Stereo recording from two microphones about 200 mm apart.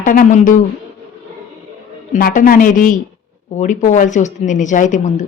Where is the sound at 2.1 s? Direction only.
40° left (ahead or behind).